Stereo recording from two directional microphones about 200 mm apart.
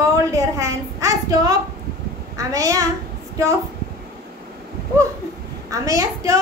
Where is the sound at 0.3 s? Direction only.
15° right (ahead or behind).